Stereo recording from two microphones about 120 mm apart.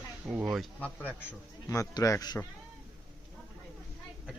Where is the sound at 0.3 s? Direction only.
5° right (ahead or behind).